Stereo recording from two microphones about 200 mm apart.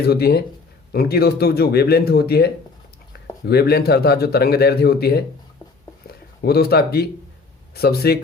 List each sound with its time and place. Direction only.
0.0 s speech: 55° left (ahead or behind)
6.4 s speech: 50° left (ahead or behind)